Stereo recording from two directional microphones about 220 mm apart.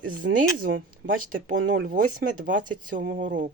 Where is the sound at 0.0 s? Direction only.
40° right (ahead or behind).